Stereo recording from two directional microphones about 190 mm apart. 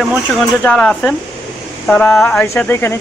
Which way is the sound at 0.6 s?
5° left (ahead or behind).